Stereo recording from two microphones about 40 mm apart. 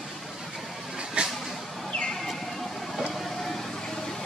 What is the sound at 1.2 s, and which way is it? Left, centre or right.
Vehicle, right.